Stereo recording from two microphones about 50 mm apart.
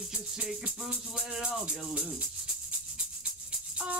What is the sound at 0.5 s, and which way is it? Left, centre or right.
Music, centre.